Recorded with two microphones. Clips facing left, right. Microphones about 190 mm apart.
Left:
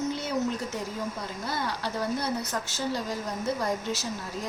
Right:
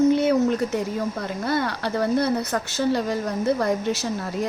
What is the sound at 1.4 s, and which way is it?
Speech, 65° right (ahead or behind).